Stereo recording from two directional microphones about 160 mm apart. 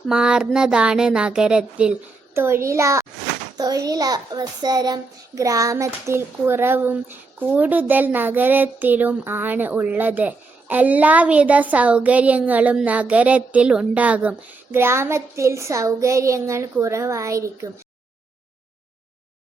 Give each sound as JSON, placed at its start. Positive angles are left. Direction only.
{"t": 0.1, "sound": "a child's voice", "side_deg": -5}